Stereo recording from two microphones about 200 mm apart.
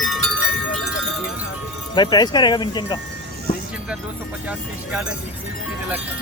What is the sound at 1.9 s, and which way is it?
Speech, 20° left (ahead or behind).